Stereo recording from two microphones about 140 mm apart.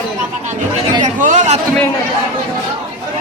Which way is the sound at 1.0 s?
60° right (ahead or behind).